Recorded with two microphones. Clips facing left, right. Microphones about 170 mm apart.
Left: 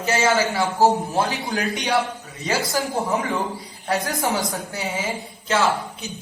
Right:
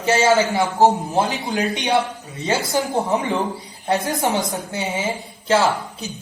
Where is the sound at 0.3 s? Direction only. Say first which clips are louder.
Right 3 dB; 20° right (ahead or behind).